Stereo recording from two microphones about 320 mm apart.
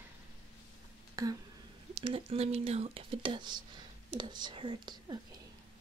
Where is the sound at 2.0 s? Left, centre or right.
Centre.